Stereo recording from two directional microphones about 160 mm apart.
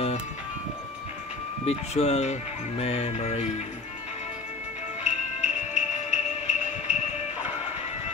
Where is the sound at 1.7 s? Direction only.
45° left (ahead or behind).